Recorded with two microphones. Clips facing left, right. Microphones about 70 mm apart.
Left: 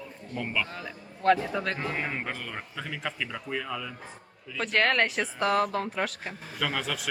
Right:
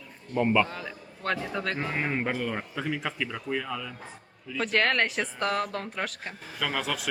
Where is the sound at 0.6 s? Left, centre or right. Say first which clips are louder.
Right 2 dB; centre.